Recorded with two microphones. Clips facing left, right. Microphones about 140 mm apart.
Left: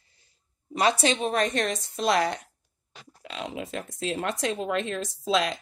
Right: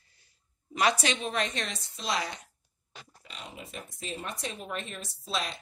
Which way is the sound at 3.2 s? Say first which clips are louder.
Left 11 dB; 90° left.